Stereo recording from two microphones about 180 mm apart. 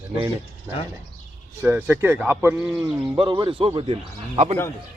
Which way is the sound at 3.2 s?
25° right (ahead or behind).